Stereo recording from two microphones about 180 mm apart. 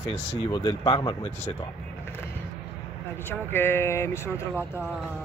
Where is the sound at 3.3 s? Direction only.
10° left (ahead or behind).